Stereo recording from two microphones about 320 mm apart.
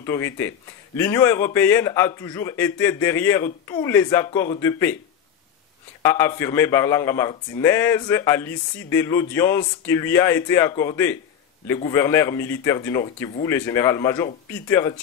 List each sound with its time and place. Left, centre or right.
0.0 s a man's voice: centre
6.0 s a man's voice: centre